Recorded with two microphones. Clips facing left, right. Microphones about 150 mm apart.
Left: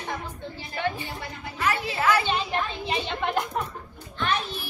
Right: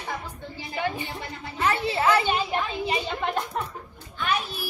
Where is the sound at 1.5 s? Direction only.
30° right (ahead or behind).